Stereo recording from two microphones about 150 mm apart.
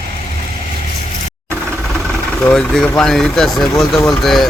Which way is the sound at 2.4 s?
5° left (ahead or behind).